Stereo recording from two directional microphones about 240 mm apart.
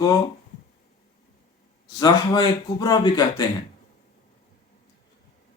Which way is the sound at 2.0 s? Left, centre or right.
Centre.